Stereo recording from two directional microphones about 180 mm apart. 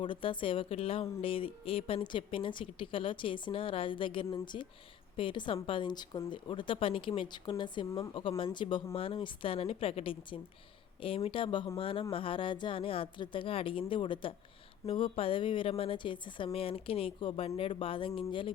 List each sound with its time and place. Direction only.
0.0 s a woman's voice: 30° left (ahead or behind)